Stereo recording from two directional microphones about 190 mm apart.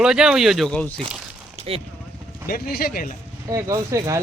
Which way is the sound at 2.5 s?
50° left (ahead or behind).